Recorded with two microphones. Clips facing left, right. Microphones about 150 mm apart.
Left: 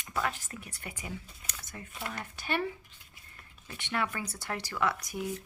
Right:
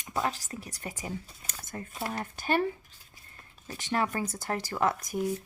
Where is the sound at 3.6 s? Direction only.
40° right (ahead or behind).